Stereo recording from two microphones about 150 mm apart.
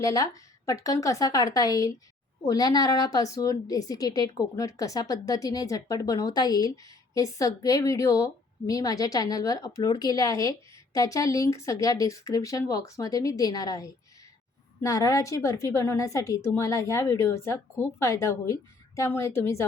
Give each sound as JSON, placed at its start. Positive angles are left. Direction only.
{"t": 0.0, "sound": "a woman's voice", "side_deg": 20}